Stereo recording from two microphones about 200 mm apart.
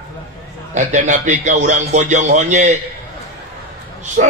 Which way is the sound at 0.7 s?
40° right (ahead or behind).